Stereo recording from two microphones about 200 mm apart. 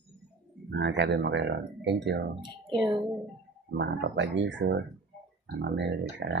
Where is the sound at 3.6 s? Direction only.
60° right (ahead or behind).